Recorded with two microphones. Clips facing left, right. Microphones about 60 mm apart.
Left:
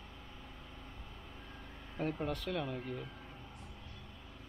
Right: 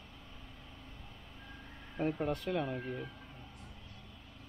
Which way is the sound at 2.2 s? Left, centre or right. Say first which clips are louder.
Right 3 dB; centre.